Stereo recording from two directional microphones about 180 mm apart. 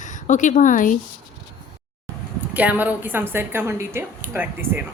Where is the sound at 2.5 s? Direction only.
10° right (ahead or behind).